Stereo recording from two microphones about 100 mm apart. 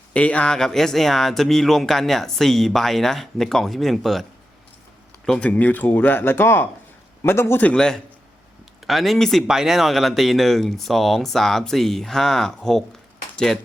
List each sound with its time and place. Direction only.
0.1 s a man's voice: 10° left (ahead or behind)
7.6 s speech: 10° left (ahead or behind)